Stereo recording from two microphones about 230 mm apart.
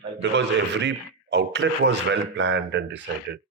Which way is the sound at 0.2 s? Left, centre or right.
Right.